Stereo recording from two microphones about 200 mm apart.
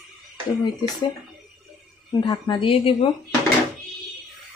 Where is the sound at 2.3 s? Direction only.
20° left (ahead or behind).